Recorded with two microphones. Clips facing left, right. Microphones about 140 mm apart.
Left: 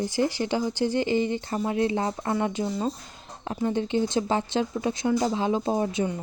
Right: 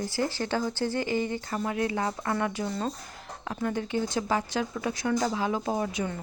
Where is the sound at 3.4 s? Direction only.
25° left (ahead or behind).